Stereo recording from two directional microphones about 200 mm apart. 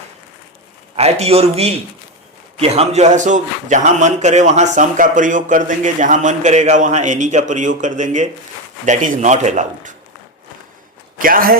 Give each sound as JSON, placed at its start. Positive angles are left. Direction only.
{"t": 0.9, "sound": "a man's voice", "side_deg": -30}
{"t": 11.2, "sound": "a man's voice", "side_deg": -45}